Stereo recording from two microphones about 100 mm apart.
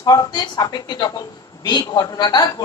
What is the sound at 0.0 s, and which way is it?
A woman's voice, 45° left (ahead or behind).